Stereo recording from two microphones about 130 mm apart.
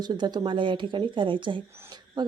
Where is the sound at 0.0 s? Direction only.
35° right (ahead or behind).